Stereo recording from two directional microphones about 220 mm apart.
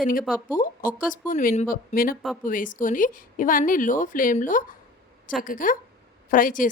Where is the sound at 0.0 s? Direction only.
40° left (ahead or behind).